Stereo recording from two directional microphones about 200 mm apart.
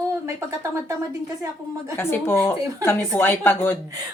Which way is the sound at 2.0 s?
10° left (ahead or behind).